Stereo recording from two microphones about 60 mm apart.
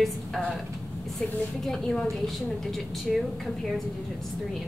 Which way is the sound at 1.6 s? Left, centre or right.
Centre.